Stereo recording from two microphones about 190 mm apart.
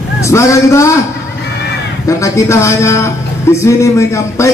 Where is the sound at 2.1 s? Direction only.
15° left (ahead or behind).